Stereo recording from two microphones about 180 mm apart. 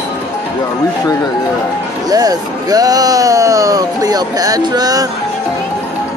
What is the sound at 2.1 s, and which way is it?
Speech, 20° right (ahead or behind).